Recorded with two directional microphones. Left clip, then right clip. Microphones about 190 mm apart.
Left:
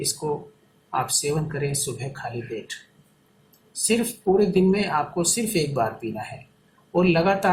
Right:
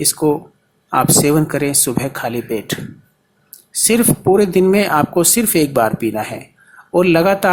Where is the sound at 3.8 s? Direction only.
40° right (ahead or behind).